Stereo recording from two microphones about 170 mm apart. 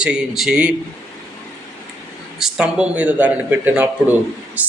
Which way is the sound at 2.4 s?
5° right (ahead or behind).